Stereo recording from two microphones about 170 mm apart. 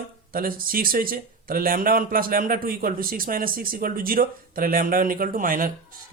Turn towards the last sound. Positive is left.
turn(degrees=-55)  # may be behind; listen again after turning